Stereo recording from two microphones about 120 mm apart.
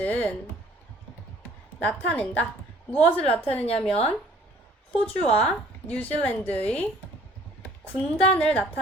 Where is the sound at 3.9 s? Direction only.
55° left (ahead or behind).